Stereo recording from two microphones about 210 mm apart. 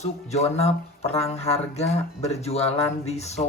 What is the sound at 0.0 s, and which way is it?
Speech, 30° left (ahead or behind).